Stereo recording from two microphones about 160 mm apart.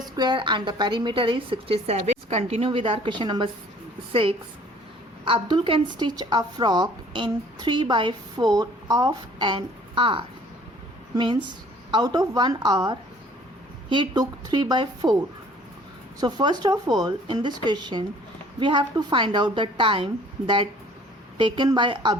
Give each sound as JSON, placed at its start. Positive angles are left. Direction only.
{"t": 0.0, "sound": "a woman's voice", "side_deg": -25}
{"t": 16.2, "sound": "a woman's voice", "side_deg": -25}
{"t": 21.3, "sound": "a woman's voice", "side_deg": -30}